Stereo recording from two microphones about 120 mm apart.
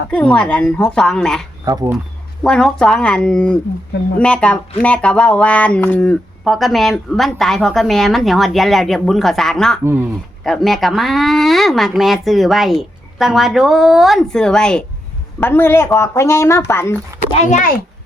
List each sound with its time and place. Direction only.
0.1 s a woman's voice: 10° left (ahead or behind)
1.6 s speech: 30° right (ahead or behind)
2.4 s a woman's voice: 5° left (ahead or behind)
15.4 s speech: 15° left (ahead or behind)
17.3 s a child's voice: 90° left